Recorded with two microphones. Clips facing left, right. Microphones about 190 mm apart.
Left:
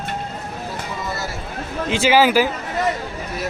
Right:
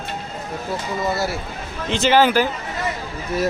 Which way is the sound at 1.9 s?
10° left (ahead or behind).